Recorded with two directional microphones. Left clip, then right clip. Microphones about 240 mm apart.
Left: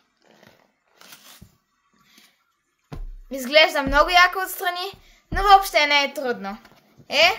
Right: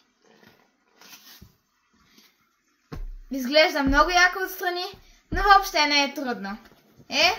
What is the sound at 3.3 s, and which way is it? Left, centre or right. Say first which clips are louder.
A woman's voice: left 3 dB; left.